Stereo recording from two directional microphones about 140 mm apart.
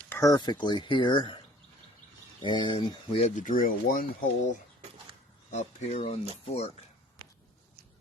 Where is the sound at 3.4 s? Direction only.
85° left.